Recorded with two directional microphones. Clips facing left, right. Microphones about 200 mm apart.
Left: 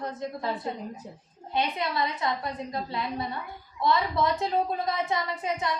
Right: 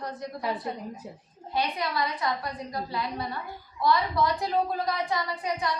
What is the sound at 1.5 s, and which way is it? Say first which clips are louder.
A woman's voice: left 1 dB; 25° left (ahead or behind).